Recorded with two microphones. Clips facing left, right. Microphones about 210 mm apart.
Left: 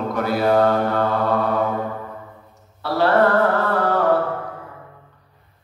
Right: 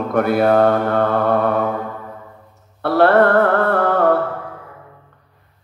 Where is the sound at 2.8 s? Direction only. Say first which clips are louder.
Right 4 dB; 55° right (ahead or behind).